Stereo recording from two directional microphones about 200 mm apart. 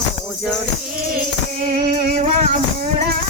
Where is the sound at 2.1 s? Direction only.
35° right (ahead or behind).